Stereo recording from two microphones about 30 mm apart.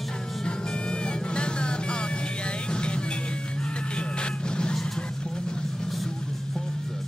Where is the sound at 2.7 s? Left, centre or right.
Left.